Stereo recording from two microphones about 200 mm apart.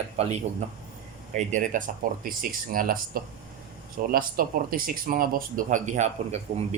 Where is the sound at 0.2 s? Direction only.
35° right (ahead or behind).